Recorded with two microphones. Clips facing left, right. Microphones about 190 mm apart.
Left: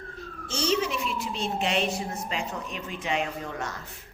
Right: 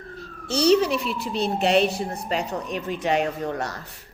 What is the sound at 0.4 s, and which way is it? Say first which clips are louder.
A child's voice: right 8 dB; 35° right (ahead or behind).